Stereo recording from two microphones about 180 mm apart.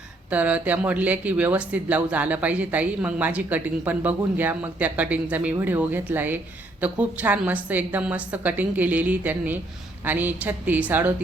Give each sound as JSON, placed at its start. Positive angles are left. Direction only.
{"t": 0.3, "sound": "speech", "side_deg": -10}